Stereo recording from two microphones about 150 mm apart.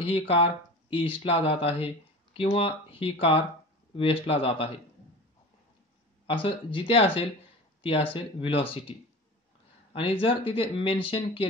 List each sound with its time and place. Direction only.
0.0 s speech: 40° left (ahead or behind)
6.2 s speech: 35° left (ahead or behind)
9.9 s speech: 35° left (ahead or behind)